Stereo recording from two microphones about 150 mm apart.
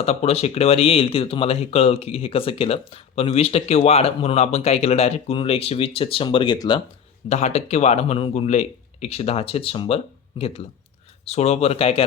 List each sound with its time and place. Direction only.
0.0 s speech: 45° left (ahead or behind)
7.3 s speech: 50° left (ahead or behind)